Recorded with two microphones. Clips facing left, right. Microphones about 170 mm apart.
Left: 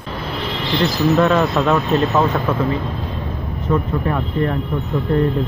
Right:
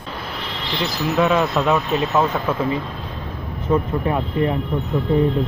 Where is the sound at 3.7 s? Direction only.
15° right (ahead or behind).